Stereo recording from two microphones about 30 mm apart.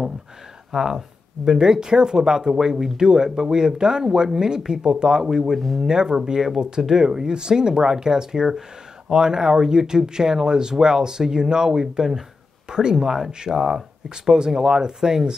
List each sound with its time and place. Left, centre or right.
0.7 s speech: centre
1.4 s speech: right